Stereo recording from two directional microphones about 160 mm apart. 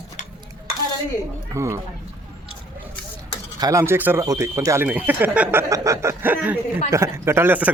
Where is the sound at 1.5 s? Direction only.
15° right (ahead or behind).